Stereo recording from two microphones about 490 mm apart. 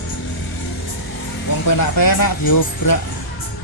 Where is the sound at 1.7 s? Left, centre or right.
Left.